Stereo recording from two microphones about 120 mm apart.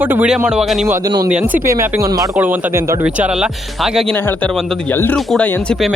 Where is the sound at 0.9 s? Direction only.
20° right (ahead or behind).